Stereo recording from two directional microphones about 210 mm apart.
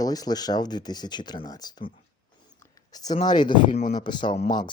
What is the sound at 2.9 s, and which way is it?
Speech, 20° left (ahead or behind).